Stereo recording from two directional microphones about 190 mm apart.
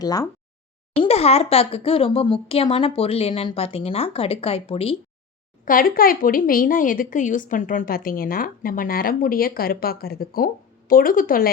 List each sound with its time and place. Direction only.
0.0 s a sound: 20° left (ahead or behind)
0.9 s speech: 30° left (ahead or behind)
5.6 s a woman's voice: 50° left (ahead or behind)